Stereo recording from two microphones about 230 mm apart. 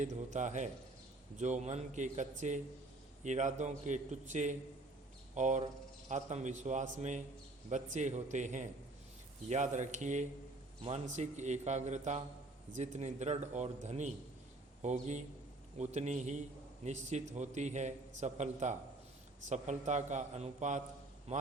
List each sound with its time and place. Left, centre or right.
0.0 s a man's voice: right
5.3 s a sound: right
6.1 s a man's voice: right